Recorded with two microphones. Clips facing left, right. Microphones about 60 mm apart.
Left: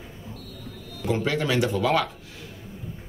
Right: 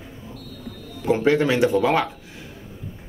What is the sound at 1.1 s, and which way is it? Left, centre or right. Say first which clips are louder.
Speech: right 6 dB; right.